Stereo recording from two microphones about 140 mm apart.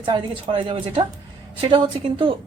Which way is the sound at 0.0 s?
35° right (ahead or behind).